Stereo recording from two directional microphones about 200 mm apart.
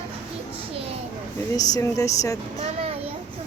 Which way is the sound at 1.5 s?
20° left (ahead or behind).